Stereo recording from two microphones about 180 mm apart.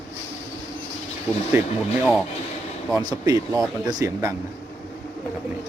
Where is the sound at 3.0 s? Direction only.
20° right (ahead or behind).